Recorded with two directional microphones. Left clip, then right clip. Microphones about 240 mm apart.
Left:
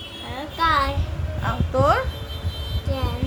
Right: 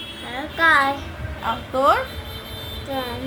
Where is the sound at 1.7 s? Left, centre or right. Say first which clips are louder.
Right 2 dB; centre.